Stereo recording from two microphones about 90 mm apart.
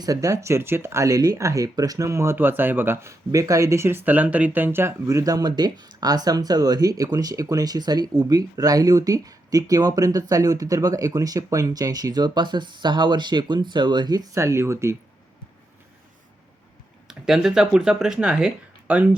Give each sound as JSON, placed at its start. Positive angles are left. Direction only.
{"t": 0.0, "sound": "speech", "side_deg": -40}
{"t": 14.3, "sound": "speech", "side_deg": -30}
{"t": 17.1, "sound": "speech", "side_deg": -5}